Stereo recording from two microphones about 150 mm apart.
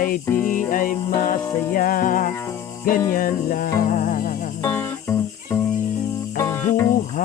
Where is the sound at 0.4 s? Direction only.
65° left (ahead or behind).